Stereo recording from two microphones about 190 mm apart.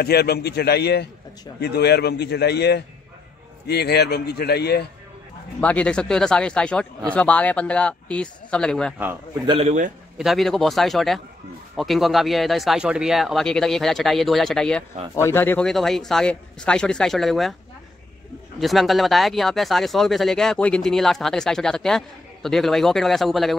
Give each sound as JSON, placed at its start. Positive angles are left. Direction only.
{"t": 0.0, "sound": "speech", "side_deg": 55}
{"t": 5.6, "sound": "speech", "side_deg": 5}
{"t": 9.5, "sound": "a man's voice", "side_deg": -35}
{"t": 10.1, "sound": "speech", "side_deg": 0}
{"t": 18.6, "sound": "speech", "side_deg": 0}